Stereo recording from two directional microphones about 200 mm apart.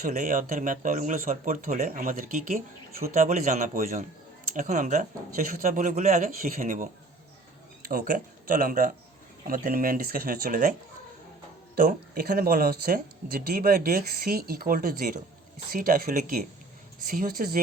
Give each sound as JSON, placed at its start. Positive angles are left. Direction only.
{"t": 0.0, "sound": "speech", "side_deg": -45}